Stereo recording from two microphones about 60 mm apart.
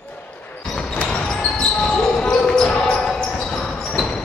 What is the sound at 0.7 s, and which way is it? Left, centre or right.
Basketball bounce, centre.